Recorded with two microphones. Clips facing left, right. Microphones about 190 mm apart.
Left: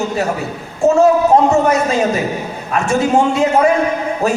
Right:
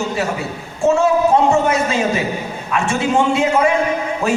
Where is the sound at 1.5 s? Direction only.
40° left (ahead or behind).